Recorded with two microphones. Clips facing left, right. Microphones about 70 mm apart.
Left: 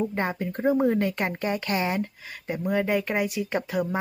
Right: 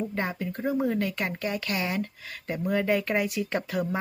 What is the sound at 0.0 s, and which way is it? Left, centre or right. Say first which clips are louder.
Speech: left 3 dB; left.